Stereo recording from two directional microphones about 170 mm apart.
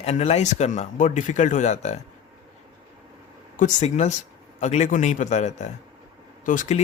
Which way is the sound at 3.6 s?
40° left (ahead or behind).